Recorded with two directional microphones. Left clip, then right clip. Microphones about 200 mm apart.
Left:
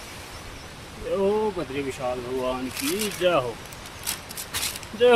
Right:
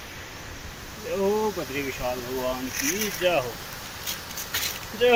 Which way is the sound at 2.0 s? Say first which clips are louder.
Left 2 dB; 25° left (ahead or behind).